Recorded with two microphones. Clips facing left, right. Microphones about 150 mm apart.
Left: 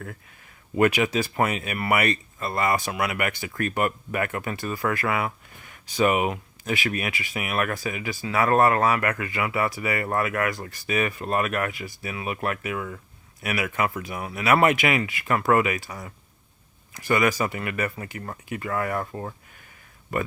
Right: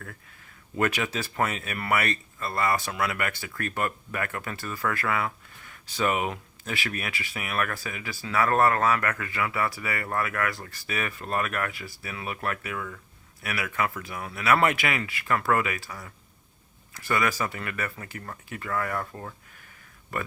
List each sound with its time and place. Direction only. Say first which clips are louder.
0.8 s speech: left 6 dB; 15° left (ahead or behind)